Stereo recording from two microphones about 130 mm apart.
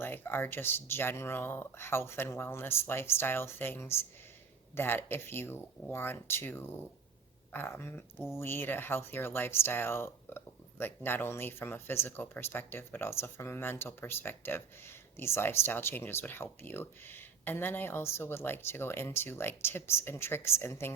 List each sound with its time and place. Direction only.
0.0 s speech: 15° left (ahead or behind)